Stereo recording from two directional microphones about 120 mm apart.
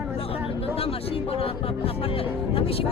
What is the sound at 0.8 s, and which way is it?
Speech, 50° left (ahead or behind).